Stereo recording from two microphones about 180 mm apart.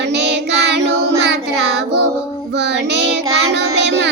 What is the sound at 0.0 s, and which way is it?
Child singing, 70° right (ahead or behind).